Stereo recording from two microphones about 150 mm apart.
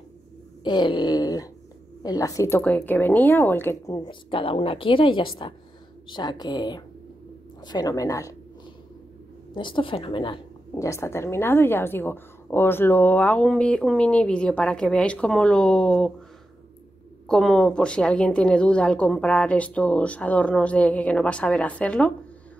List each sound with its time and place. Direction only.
0.7 s a sound: 30° left (ahead or behind)
2.6 s a woman's voice: 10° left (ahead or behind)
4.0 s a woman's voice: 35° left (ahead or behind)
6.0 s a sound: 30° left (ahead or behind)
9.5 s a woman's voice: 35° left (ahead or behind)
10.7 s a woman's voice: 20° left (ahead or behind)
17.3 s a woman's voice: 5° left (ahead or behind)